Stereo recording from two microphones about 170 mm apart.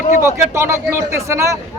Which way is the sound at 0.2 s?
15° right (ahead or behind).